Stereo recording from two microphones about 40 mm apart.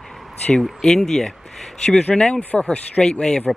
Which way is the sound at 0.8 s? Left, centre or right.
Centre.